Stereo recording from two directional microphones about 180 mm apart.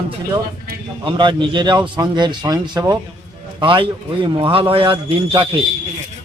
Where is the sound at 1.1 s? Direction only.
25° right (ahead or behind).